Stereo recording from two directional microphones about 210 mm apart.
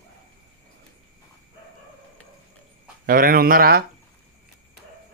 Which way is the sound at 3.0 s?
45° right (ahead or behind).